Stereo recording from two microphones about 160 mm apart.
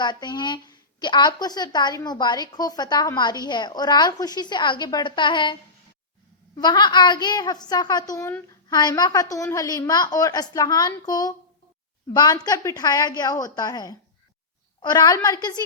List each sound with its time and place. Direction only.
0.0 s a woman's voice: 25° left (ahead or behind)
6.6 s a woman's voice: 30° left (ahead or behind)